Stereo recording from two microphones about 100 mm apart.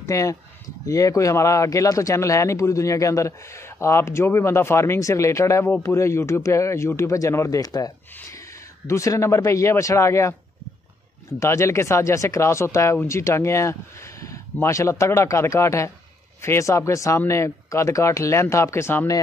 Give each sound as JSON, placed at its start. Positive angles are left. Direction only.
{"t": 0.0, "sound": "speech", "side_deg": 35}
{"t": 11.3, "sound": "speech", "side_deg": 30}